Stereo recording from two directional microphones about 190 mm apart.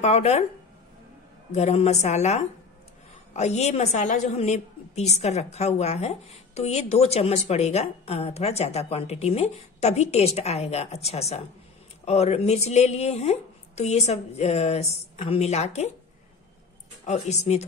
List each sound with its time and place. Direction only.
0.0 s a woman's voice: 35° left (ahead or behind)
1.5 s a woman's voice: 35° left (ahead or behind)
17.0 s a woman's voice: 35° left (ahead or behind)